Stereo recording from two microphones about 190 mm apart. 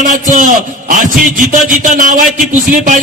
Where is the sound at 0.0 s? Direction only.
45° right (ahead or behind).